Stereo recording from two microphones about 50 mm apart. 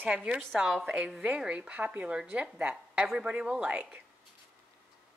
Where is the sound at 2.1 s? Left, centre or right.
Centre.